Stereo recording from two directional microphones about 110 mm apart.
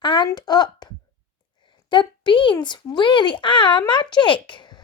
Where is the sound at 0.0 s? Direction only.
45° left (ahead or behind).